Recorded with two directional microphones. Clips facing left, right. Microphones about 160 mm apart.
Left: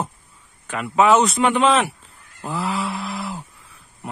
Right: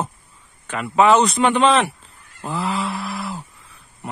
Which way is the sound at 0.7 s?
5° left (ahead or behind).